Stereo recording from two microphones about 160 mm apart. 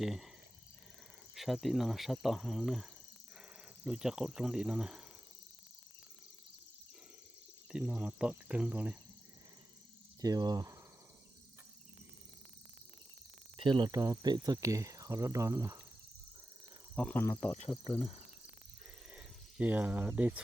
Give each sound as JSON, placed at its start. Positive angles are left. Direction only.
{"t": 0.0, "sound": "speech", "side_deg": 0}
{"t": 1.4, "sound": "speech", "side_deg": 0}
{"t": 7.7, "sound": "speech", "side_deg": -5}
{"t": 10.2, "sound": "speech", "side_deg": -25}
{"t": 13.6, "sound": "speech", "side_deg": -30}
{"t": 16.9, "sound": "speech", "side_deg": 5}
{"t": 19.1, "sound": "speech", "side_deg": -10}